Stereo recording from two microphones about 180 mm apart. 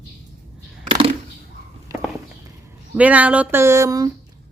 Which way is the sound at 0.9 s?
30° right (ahead or behind).